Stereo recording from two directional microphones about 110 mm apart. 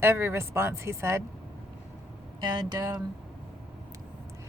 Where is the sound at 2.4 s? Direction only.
40° right (ahead or behind).